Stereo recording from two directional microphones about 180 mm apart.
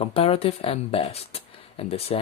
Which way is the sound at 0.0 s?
30° left (ahead or behind).